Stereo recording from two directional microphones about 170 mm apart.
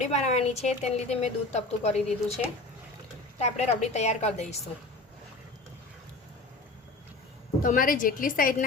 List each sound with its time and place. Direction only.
0.0 s a woman's voice: 40° left (ahead or behind)
7.6 s a woman's voice: 55° left (ahead or behind)